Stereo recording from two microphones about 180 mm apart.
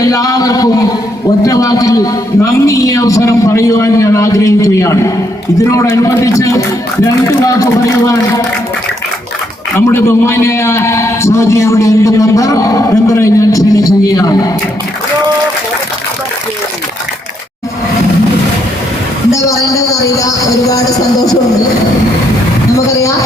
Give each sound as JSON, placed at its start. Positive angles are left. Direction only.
{"t": 0.0, "sound": "a man's voice", "side_deg": 20}
{"t": 9.7, "sound": "a man's voice", "side_deg": 15}
{"t": 19.3, "sound": "speech", "side_deg": 15}
{"t": 22.9, "sound": "speech", "side_deg": 15}